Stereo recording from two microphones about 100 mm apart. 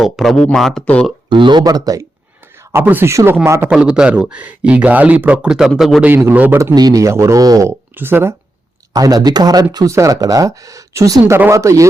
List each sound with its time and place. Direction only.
0.0 s speech: centre (ahead or behind)
1.3 s speech: 50° right (ahead or behind)
2.7 s a man's voice: 20° right (ahead or behind)
3.7 s speech: 10° right (ahead or behind)
6.0 s a man's voice: 20° right (ahead or behind)
6.7 s speech: 40° right (ahead or behind)
7.7 s speech: 20° right (ahead or behind)
8.9 s speech: 40° right (ahead or behind)